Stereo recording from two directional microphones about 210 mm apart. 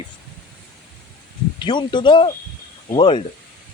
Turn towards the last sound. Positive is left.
turn(degrees=25)  # may be behind; listen again after turning